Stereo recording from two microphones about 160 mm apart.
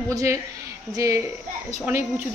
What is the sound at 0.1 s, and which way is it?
A man's voice, 20° right (ahead or behind).